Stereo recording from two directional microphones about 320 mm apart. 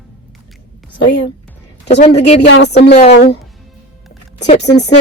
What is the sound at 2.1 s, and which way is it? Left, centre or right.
Speech, left.